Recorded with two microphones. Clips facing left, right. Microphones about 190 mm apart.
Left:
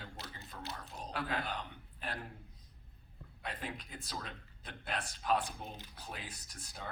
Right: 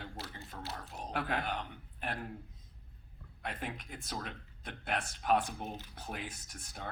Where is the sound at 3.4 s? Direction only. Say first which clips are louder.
Right 2 dB; 60° right (ahead or behind).